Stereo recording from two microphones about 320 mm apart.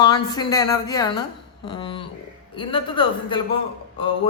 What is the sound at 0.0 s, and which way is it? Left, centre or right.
Speech, centre.